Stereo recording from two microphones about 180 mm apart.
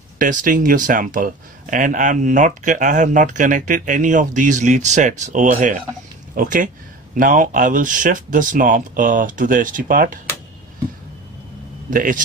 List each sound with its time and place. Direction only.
0.2 s speech: 50° right (ahead or behind)
11.9 s speech: 50° right (ahead or behind)